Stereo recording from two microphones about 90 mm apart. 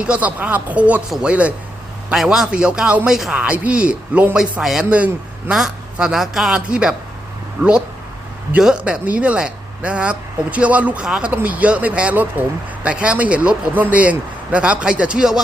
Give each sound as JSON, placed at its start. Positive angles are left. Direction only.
{"t": 0.0, "sound": "speech", "side_deg": -15}
{"t": 4.4, "sound": "a man's voice", "side_deg": -5}
{"t": 8.5, "sound": "speech", "side_deg": -10}